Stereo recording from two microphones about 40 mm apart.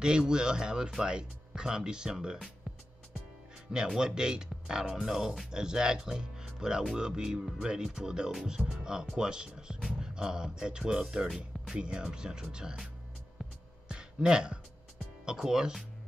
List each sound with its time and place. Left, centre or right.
0.0 s speech: right
3.7 s speech: centre
11.2 s speech: centre
11.7 s speech: right
13.8 s a sound: right
15.2 s speech: centre